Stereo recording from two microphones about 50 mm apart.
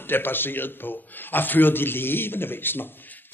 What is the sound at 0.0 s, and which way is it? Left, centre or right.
A man's voice, left.